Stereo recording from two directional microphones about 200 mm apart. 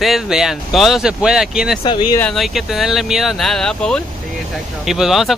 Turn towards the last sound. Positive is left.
turn(degrees=0)  # may be behind; listen again after turning